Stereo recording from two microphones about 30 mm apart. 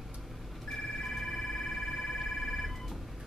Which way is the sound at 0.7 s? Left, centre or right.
Centre.